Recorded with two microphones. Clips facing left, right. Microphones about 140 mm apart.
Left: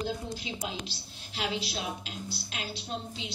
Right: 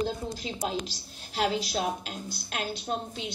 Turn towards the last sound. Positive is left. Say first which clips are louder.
# right 5 dB
turn(degrees=-50)  # may be behind; listen again after turning